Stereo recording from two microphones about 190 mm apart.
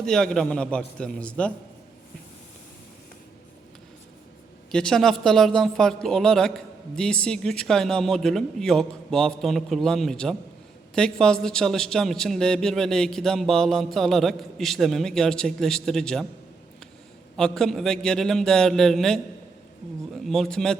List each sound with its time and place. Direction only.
0.0 s a man's voice: 5° left (ahead or behind)
4.7 s a man's voice: 5° left (ahead or behind)
17.3 s a man's voice: 5° left (ahead or behind)
20.2 s a man's voice: centre (ahead or behind)